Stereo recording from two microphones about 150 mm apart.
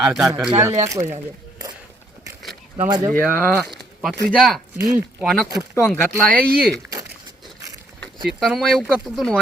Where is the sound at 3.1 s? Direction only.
10° left (ahead or behind).